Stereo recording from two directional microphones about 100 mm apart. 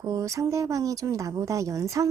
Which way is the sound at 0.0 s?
35° right (ahead or behind).